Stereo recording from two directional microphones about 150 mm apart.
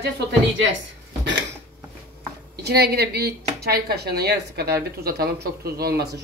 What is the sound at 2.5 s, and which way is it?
A woman's voice, 90° right.